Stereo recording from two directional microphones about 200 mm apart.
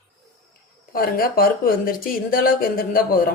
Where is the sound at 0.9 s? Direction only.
45° left (ahead or behind).